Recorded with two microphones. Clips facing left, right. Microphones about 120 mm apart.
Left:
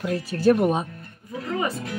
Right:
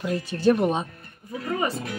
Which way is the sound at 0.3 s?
5° left (ahead or behind).